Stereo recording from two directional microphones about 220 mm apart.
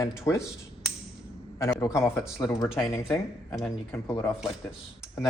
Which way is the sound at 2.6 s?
Centre (ahead or behind).